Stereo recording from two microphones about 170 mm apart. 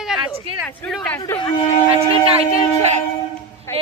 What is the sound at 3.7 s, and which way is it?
Speech, 15° left (ahead or behind).